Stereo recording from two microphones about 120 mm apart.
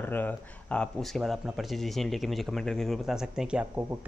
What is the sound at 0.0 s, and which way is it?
Speech, 15° left (ahead or behind).